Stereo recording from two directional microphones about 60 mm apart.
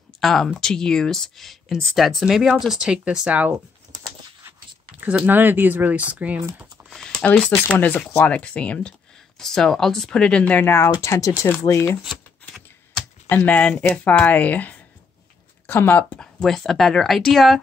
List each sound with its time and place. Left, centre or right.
0.2 s speech: centre
2.8 s speech: centre
5.2 s speech: right
6.8 s a sound: right
7.2 s speech: left
8.2 s speech: centre
10.7 s speech: left
11.1 s speech: left
13.3 s speech: left
16.2 s speech: centre